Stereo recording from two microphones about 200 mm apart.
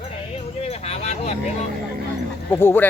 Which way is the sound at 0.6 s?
30° left (ahead or behind).